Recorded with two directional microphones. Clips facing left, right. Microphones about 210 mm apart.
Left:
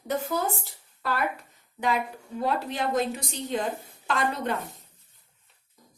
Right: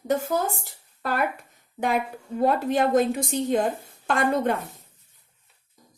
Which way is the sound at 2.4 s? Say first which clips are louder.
Right 7 dB; 50° right (ahead or behind).